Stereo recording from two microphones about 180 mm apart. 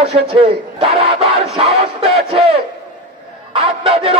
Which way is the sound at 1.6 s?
35° right (ahead or behind).